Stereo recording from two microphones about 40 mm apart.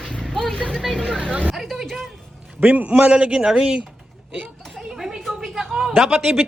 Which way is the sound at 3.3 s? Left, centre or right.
Centre.